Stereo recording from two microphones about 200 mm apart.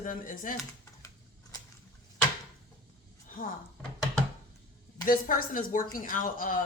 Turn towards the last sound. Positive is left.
turn(degrees=45)  # may be behind; listen again after turning